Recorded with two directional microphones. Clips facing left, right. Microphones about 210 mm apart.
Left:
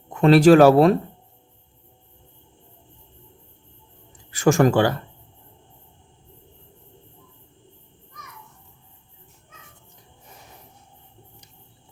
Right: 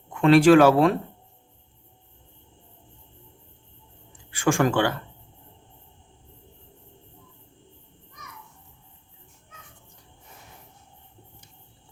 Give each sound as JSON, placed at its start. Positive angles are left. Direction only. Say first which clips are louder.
{"t": 0.1, "sound": "speech", "louder": "left 2 dB", "side_deg": 40}
{"t": 4.3, "sound": "speech", "louder": "left 5 dB", "side_deg": 40}